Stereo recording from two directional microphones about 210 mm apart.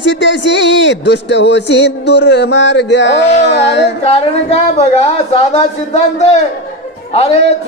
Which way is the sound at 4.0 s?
30° left (ahead or behind).